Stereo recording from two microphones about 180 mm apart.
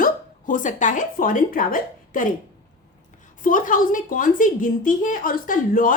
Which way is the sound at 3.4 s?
50° left (ahead or behind).